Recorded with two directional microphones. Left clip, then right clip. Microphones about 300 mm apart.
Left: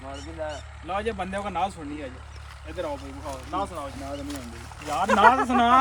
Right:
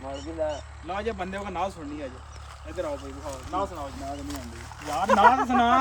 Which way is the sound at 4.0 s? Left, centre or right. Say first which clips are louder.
Left 1 dB; centre.